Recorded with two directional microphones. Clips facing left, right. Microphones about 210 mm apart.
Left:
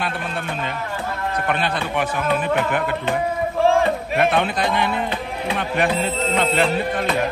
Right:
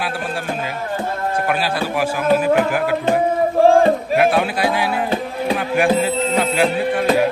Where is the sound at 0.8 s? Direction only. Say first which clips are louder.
Right 4 dB; 30° right (ahead or behind).